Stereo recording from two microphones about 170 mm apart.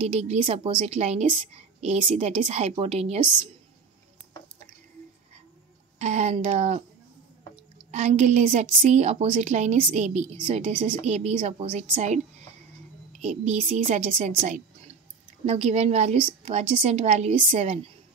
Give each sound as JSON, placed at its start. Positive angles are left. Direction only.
{"t": 0.1, "sound": "a woman's voice", "side_deg": -35}
{"t": 5.9, "sound": "a woman's voice", "side_deg": -40}
{"t": 7.9, "sound": "a woman's voice", "side_deg": -40}